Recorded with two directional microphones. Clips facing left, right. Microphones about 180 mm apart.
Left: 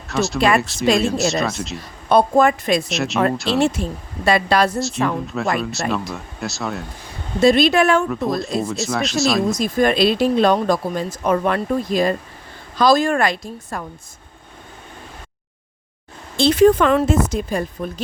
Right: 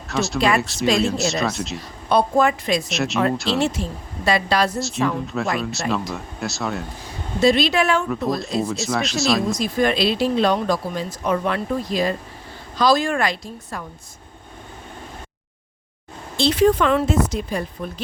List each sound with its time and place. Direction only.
0.1 s speech: centre (ahead or behind)
2.0 s speech: 50° left (ahead or behind)
2.9 s speech: centre (ahead or behind)
3.6 s speech: 50° left (ahead or behind)
4.8 s speech: centre (ahead or behind)
7.4 s speech: 50° left (ahead or behind)
8.6 s speech: centre (ahead or behind)
9.5 s speech: 45° left (ahead or behind)
16.4 s speech: 50° left (ahead or behind)